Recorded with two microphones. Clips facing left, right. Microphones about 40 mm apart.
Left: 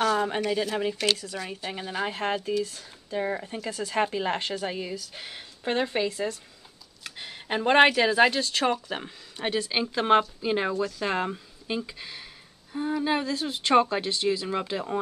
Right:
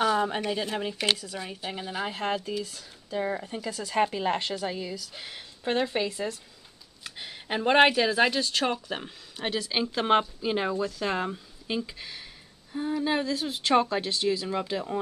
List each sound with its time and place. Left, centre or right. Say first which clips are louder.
0.0 s a sound: even; centre
0.4 s speech: left 3 dB; centre
1.7 s a woman's voice: left 2 dB; centre